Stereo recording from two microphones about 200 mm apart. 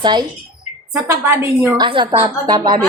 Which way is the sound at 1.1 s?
10° right (ahead or behind).